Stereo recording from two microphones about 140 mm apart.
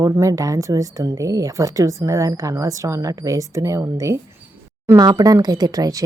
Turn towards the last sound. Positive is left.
turn(degrees=-25)  # may be behind; listen again after turning